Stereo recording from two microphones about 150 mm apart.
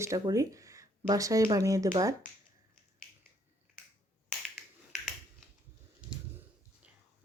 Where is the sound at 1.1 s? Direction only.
20° right (ahead or behind).